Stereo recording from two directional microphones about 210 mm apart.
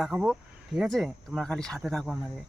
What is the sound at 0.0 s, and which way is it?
Speech, centre (ahead or behind).